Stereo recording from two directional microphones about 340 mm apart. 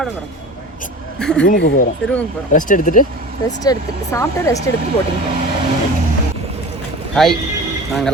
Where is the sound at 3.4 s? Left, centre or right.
Centre.